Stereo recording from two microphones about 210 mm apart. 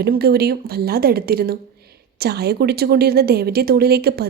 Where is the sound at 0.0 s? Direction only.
50° right (ahead or behind).